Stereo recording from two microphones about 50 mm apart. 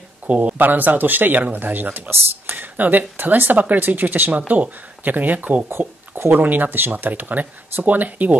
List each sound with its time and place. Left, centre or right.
0.3 s speech: right
5.7 s speech: right
6.3 s speech: right